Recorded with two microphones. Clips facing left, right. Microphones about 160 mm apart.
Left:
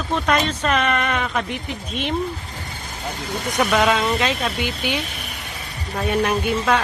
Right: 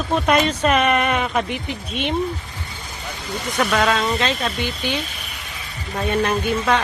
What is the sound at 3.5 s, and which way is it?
Speech, 15° left (ahead or behind).